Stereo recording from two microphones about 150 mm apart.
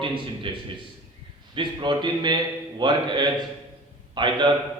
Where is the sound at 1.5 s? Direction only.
30° right (ahead or behind).